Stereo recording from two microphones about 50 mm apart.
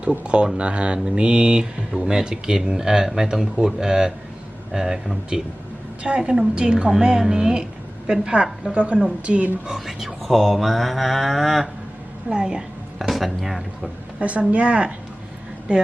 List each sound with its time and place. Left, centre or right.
0.0 s a woman's voice: right
9.6 s cattle: centre
12.3 s speech: centre
13.0 s speech: centre
14.2 s a woman's voice: right